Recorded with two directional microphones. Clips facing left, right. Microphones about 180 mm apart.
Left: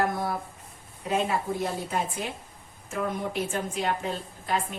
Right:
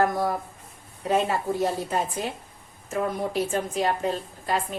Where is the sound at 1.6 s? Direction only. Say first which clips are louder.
Right 4 dB; 40° right (ahead or behind).